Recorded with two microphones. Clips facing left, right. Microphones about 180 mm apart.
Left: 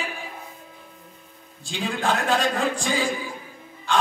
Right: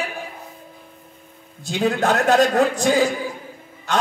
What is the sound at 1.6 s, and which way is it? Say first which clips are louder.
A man's voice: right 6 dB; 45° right (ahead or behind).